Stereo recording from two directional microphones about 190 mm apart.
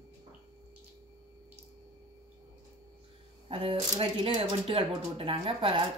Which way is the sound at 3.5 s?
30° right (ahead or behind).